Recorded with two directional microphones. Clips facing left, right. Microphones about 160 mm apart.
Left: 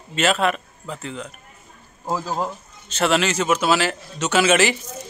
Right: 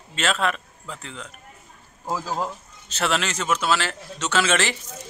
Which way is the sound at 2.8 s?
Centre (ahead or behind).